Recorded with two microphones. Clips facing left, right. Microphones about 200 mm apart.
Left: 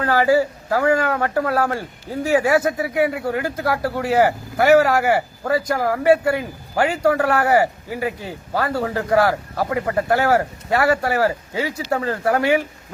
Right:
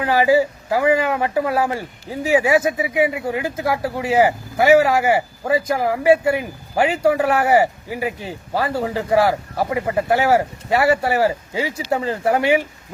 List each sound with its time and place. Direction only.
0.0 s speech: 15° right (ahead or behind)